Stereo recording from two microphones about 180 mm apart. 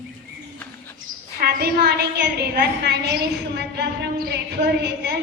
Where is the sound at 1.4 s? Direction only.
60° right (ahead or behind).